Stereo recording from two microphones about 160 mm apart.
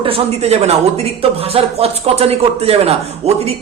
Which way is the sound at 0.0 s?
40° right (ahead or behind).